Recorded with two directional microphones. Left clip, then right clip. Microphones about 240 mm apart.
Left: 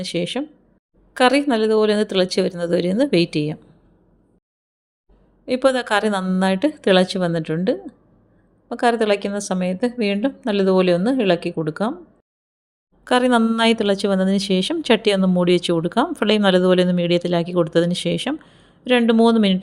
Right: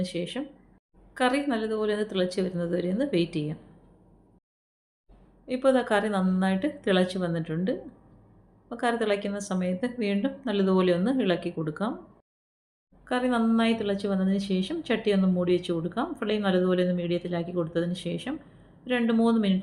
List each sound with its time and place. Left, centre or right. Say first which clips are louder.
0.0 s a woman's voice: left 8 dB; left
5.5 s a woman's voice: left 6 dB; left
13.1 s a woman's voice: left 10 dB; left